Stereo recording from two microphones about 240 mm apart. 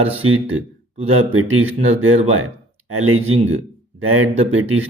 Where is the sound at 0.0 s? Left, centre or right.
Right.